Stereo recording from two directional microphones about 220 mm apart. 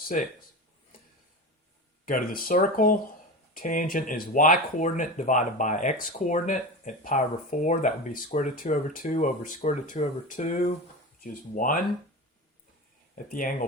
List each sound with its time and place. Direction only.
0.1 s speech: 35° left (ahead or behind)
2.0 s speech: 40° left (ahead or behind)
13.2 s speech: 40° left (ahead or behind)